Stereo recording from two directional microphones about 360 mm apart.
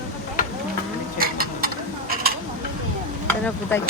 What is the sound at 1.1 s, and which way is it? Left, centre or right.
Mechanisms, right.